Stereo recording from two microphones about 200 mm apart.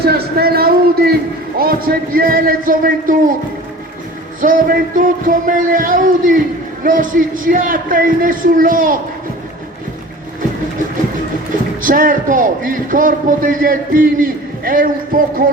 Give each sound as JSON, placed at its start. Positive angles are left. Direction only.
{"t": 0.0, "sound": "a sound", "side_deg": -50}
{"t": 1.5, "sound": "a man's voice", "side_deg": -45}
{"t": 4.4, "sound": "a man's voice", "side_deg": -40}
{"t": 11.8, "sound": "a man's voice", "side_deg": -45}